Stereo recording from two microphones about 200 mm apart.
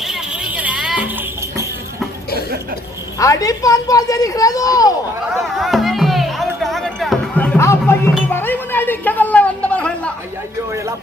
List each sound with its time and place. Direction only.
0.0 s music: 5° right (ahead or behind)
3.2 s speech: 15° left (ahead or behind)
5.5 s music: centre (ahead or behind)
8.3 s a sound: 10° left (ahead or behind)